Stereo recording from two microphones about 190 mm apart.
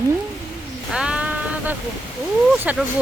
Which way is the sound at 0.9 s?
5° right (ahead or behind).